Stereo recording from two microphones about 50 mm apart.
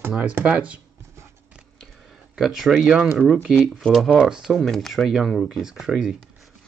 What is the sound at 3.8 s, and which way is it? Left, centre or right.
Speech, centre.